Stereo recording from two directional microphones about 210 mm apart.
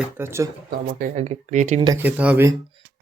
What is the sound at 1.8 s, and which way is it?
Speech, 10° right (ahead or behind).